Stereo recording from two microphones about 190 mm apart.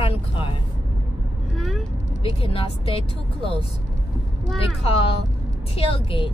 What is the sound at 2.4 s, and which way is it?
Speech, 30° left (ahead or behind).